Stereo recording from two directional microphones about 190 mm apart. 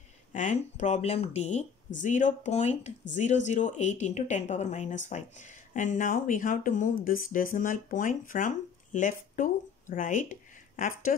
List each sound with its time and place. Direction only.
0.3 s speech: 40° left (ahead or behind)